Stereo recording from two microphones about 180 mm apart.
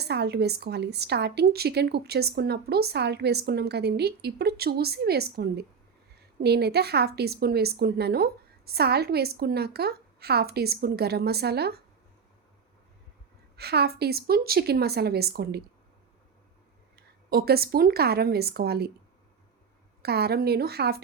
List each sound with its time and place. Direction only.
0.0 s a woman's voice: 65° right (ahead or behind)
13.6 s a woman's voice: 65° right (ahead or behind)
17.2 s a woman's voice: 60° right (ahead or behind)
20.0 s a woman's voice: 60° right (ahead or behind)